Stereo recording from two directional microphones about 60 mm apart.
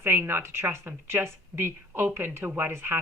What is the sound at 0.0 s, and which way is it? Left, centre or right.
Speech, right.